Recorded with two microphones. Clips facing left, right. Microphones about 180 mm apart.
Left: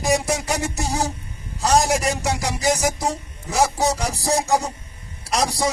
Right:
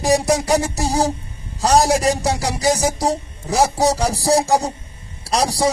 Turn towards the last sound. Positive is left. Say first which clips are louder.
# right 3 dB
turn(degrees=-35)  # may be behind; listen again after turning